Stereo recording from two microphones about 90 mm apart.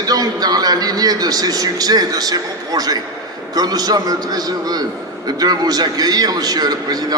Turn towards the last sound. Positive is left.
turn(degrees=-45)  # may be behind; listen again after turning